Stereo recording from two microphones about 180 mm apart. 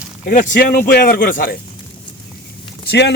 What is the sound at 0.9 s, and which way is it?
Speech, 65° left (ahead or behind).